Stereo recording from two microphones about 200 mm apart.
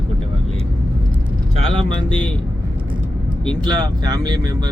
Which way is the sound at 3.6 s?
20° right (ahead or behind).